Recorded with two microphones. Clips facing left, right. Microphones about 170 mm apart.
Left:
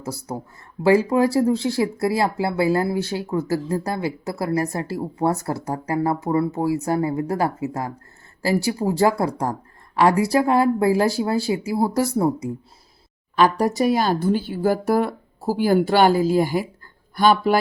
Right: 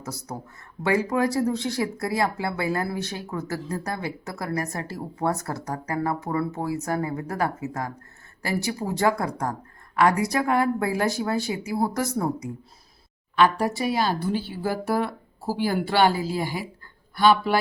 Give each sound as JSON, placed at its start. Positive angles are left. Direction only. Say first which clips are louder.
{"t": 0.0, "sound": "speech", "louder": "left 5 dB", "side_deg": 30}